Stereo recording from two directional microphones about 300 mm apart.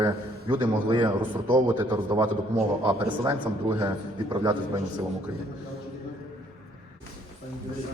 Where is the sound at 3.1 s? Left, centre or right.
Centre.